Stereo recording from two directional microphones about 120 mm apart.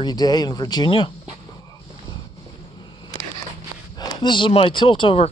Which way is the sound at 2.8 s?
40° left (ahead or behind).